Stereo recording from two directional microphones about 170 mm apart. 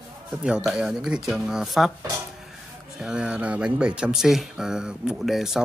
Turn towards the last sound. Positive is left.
turn(degrees=0)  # may be behind; listen again after turning